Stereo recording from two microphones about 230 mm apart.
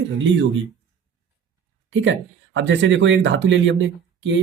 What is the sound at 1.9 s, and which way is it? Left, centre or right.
Speech, right.